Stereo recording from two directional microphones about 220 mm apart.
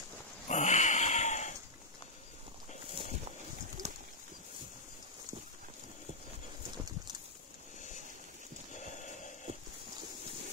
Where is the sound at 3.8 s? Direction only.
30° right (ahead or behind).